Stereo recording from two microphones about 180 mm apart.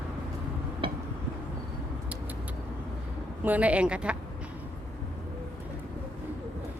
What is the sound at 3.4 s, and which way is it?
Speech, 10° right (ahead or behind).